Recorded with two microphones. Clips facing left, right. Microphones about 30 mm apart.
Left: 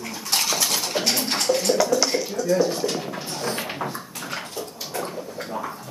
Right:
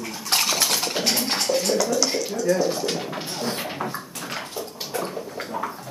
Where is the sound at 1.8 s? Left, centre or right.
Centre.